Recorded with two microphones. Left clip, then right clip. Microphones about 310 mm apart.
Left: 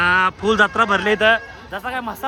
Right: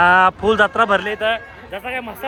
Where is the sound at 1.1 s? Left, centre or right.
Left.